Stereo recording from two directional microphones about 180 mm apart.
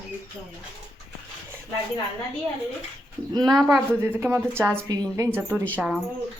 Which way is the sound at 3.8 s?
15° right (ahead or behind).